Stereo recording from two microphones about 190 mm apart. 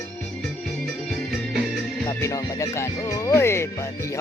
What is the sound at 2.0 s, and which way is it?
Speech, 20° left (ahead or behind).